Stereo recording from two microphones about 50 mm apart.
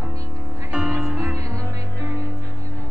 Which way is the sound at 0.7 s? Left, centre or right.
Right.